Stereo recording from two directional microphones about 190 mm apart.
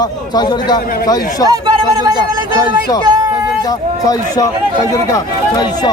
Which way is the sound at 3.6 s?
20° left (ahead or behind).